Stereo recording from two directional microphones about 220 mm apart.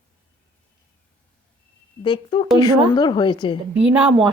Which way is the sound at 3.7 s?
5° right (ahead or behind).